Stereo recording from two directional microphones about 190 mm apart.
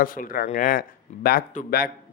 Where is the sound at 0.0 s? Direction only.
45° left (ahead or behind).